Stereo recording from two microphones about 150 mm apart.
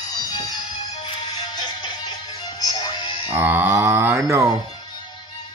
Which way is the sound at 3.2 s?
15° right (ahead or behind).